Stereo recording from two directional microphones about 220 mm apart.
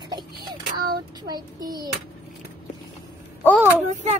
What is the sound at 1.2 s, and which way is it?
Speech, 20° right (ahead or behind).